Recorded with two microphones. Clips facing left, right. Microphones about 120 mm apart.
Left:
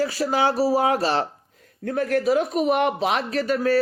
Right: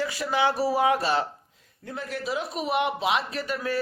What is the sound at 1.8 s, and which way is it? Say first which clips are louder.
Speech: left 11 dB; 55° left (ahead or behind).